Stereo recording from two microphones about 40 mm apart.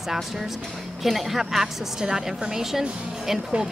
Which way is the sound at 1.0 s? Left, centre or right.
Centre.